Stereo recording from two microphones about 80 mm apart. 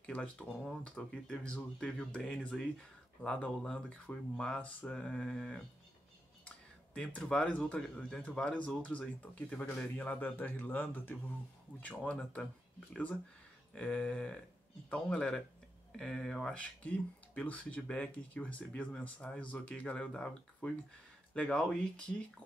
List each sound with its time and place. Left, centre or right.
0.0 s speech: centre
6.9 s a man's voice: centre
13.7 s speech: centre
16.5 s speech: centre